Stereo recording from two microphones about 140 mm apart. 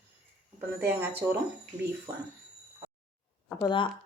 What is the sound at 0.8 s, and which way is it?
Speech, 15° right (ahead or behind).